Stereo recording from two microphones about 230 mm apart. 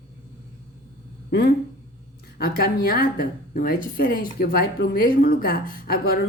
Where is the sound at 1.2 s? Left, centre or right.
Left.